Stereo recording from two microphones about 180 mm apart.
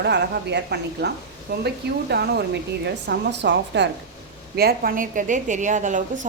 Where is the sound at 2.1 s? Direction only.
65° right (ahead or behind).